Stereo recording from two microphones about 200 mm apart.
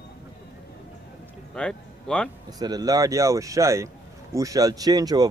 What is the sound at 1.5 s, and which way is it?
Speech, 5° left (ahead or behind).